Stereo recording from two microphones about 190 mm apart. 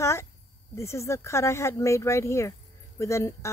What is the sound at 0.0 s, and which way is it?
Speech, 15° left (ahead or behind).